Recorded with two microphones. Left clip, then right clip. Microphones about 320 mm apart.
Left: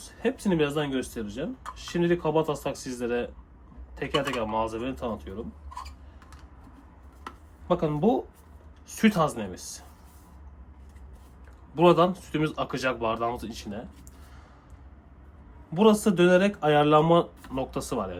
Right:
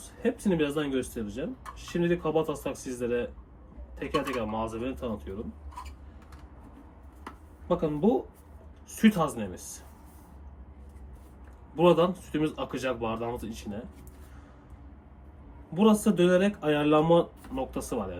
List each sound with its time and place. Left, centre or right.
0.3 s speech: left
7.7 s speech: left
11.7 s speech: left
15.7 s speech: left